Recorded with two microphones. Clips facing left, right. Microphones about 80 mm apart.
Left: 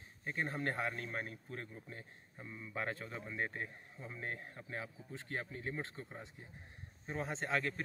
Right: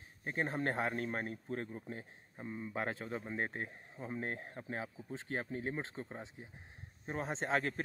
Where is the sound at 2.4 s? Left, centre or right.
Right.